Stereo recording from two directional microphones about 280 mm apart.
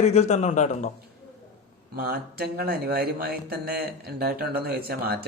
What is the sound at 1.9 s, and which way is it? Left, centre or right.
Speech, right.